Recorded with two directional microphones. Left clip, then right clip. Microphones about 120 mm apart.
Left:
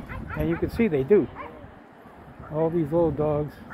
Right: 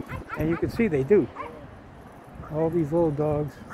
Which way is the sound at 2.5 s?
15° right (ahead or behind).